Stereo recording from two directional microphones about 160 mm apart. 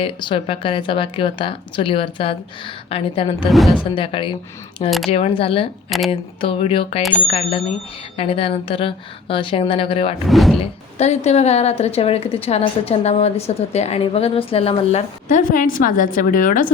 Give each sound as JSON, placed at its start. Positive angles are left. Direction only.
{"t": 0.0, "sound": "speech", "side_deg": 30}
{"t": 3.5, "sound": "speech", "side_deg": 0}
{"t": 3.9, "sound": "speech", "side_deg": 30}
{"t": 4.9, "sound": "speech", "side_deg": 0}
{"t": 5.1, "sound": "speech", "side_deg": 35}
{"t": 10.2, "sound": "speech", "side_deg": 0}
{"t": 10.6, "sound": "speech", "side_deg": 45}
{"t": 15.3, "sound": "a woman's voice", "side_deg": 55}